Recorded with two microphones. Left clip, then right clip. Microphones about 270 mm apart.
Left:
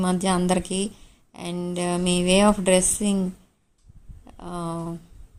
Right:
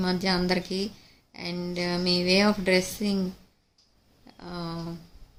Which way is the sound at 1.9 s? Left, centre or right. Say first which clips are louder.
Even; centre.